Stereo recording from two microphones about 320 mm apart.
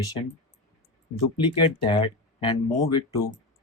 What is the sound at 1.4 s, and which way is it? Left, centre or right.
Speech, centre.